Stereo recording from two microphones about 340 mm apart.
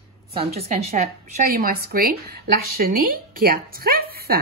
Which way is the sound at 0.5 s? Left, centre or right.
Centre.